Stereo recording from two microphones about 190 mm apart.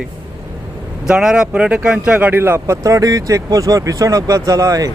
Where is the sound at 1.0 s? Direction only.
5° right (ahead or behind).